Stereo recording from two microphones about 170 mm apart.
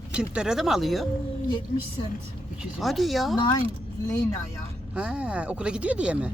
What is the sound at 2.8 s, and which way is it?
Speech, centre (ahead or behind).